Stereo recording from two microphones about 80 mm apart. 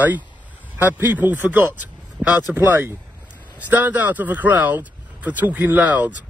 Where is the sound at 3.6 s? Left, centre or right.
Right.